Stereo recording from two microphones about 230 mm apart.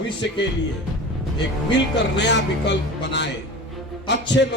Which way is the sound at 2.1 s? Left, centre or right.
Left.